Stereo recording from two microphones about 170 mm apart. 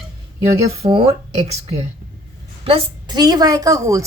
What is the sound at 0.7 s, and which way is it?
Speech, 35° right (ahead or behind).